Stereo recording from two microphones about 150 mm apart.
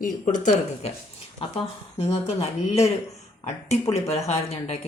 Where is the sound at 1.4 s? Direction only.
40° left (ahead or behind).